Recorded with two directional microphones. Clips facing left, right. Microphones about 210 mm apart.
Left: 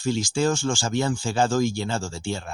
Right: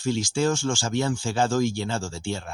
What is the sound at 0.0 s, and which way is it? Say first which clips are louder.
Speech: left 1 dB; 35° left (ahead or behind).